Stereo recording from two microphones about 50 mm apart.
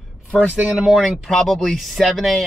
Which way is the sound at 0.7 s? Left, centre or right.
Centre.